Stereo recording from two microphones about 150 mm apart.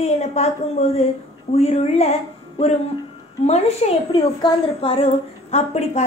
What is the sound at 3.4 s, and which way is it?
A woman's voice, 45° left (ahead or behind).